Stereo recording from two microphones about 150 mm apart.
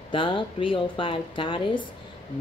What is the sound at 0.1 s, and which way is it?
Speech, 35° left (ahead or behind).